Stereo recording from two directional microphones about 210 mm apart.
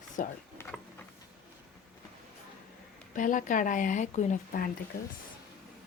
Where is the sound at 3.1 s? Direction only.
40° left (ahead or behind).